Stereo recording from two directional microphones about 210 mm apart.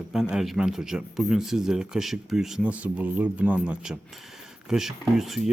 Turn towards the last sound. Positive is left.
turn(degrees=0)  # may be behind; listen again after turning